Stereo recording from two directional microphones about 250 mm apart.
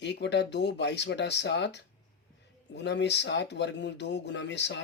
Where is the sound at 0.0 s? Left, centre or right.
Left.